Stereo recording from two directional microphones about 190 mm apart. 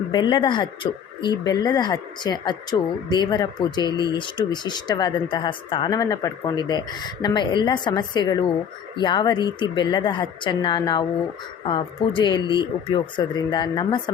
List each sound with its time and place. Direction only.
0.1 s speech: 25° left (ahead or behind)